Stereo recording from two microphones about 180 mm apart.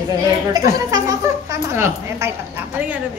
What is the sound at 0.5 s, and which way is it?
A woman's voice, 20° right (ahead or behind).